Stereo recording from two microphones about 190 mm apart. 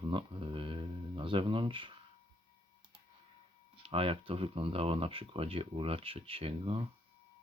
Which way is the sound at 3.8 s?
30° right (ahead or behind).